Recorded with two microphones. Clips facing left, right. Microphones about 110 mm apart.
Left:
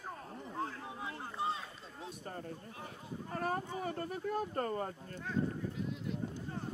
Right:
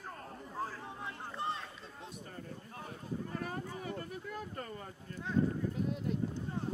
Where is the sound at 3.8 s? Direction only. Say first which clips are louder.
Left 4 dB; 40° left (ahead or behind).